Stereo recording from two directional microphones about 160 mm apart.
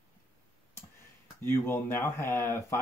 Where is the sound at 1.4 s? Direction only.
15° left (ahead or behind).